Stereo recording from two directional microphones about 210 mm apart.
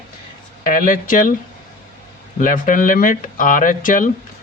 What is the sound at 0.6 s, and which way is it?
Speech, 40° left (ahead or behind).